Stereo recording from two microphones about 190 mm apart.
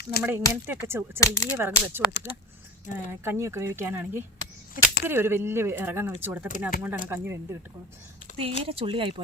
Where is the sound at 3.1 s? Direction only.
15° right (ahead or behind).